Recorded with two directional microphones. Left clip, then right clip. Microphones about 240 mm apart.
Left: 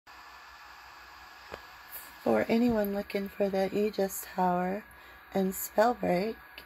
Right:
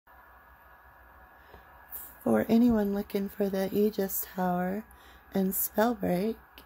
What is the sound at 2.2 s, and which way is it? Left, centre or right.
Speech, centre.